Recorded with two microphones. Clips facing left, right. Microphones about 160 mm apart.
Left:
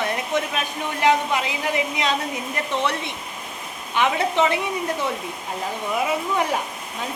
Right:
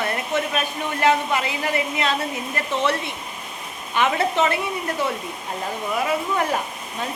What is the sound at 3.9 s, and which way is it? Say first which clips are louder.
Speech: even; 15° left (ahead or behind).